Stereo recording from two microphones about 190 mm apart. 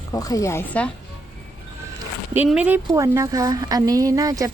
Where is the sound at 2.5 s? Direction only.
10° right (ahead or behind).